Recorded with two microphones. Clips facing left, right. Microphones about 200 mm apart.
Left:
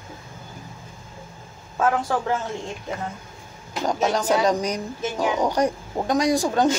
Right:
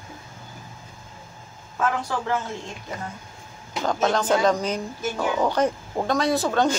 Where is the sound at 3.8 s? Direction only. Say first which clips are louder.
Even; 10° left (ahead or behind).